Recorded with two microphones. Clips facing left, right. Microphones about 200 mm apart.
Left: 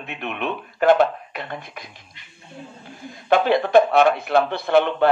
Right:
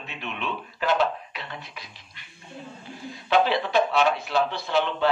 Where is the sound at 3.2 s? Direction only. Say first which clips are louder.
Left 4 dB; 50° left (ahead or behind).